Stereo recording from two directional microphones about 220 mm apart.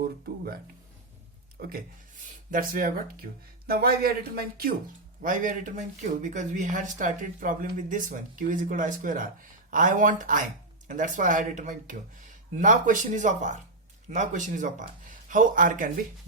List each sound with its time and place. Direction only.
1.5 s speech: 45° right (ahead or behind)